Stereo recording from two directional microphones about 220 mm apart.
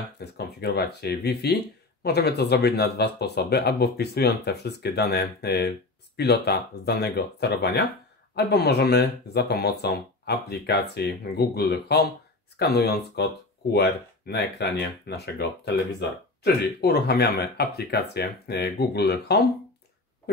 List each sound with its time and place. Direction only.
0.2 s speech: 50° left (ahead or behind)